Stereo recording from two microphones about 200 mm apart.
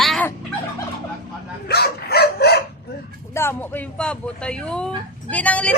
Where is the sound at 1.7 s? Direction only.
50° left (ahead or behind).